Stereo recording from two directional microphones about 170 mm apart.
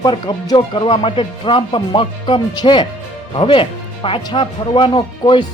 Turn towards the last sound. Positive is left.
turn(degrees=30)  # may be behind; listen again after turning